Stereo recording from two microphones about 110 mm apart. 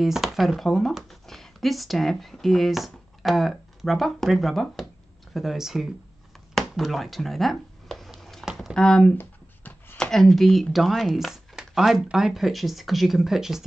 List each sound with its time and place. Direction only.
0.0 s speech: centre (ahead or behind)
6.5 s a sound: centre (ahead or behind)
8.7 s speech: 5° left (ahead or behind)
9.2 s speech: 15° left (ahead or behind); by 13.7 s 5° right (ahead or behind)